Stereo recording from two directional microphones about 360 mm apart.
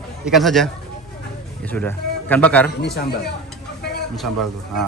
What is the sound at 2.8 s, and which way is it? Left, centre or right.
Speech, left.